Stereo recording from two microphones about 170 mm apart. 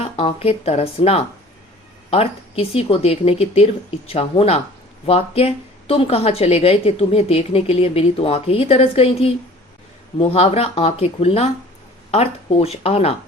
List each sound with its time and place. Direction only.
0.0 s a woman's voice: 35° left (ahead or behind)